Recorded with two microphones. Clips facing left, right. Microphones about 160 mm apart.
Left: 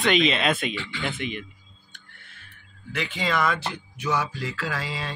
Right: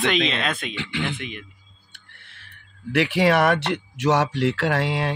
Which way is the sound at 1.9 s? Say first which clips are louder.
Even; 75° right (ahead or behind).